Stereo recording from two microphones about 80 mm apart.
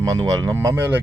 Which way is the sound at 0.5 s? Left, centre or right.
Right.